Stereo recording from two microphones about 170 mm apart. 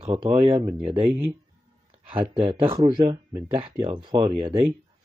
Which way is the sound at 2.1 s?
30° right (ahead or behind).